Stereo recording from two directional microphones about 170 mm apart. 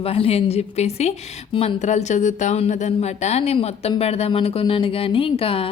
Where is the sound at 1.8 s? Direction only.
45° left (ahead or behind).